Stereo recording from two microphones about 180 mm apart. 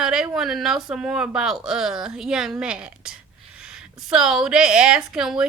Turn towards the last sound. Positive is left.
turn(degrees=-5)  # may be behind; listen again after turning